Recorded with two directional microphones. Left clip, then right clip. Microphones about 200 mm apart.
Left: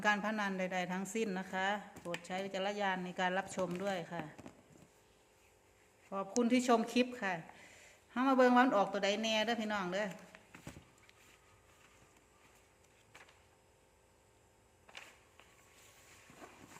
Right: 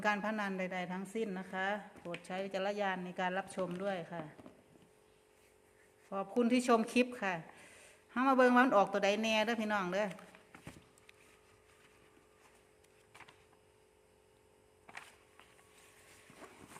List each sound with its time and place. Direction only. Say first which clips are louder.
0.0 s speech: left 1 dB; 10° right (ahead or behind)
6.1 s speech: right 1 dB; 15° right (ahead or behind)